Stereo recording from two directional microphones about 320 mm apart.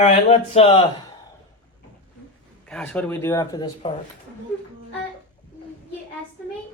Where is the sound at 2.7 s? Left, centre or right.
Centre.